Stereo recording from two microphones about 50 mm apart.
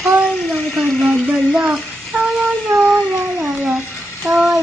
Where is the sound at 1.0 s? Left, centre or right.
Centre.